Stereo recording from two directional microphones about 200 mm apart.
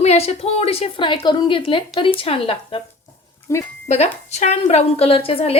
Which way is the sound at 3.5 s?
15° left (ahead or behind).